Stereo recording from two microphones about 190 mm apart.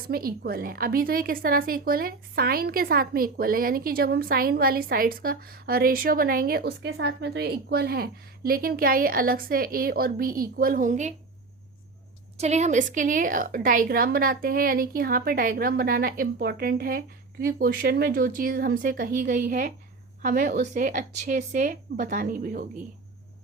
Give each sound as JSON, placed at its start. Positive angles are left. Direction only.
{"t": 0.1, "sound": "a woman's voice", "side_deg": -50}
{"t": 12.4, "sound": "a woman's voice", "side_deg": -35}